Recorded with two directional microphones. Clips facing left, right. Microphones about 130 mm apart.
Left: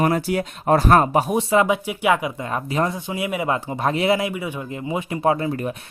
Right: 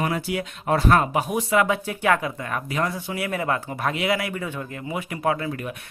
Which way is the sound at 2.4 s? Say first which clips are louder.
Left 5 dB; 25° left (ahead or behind).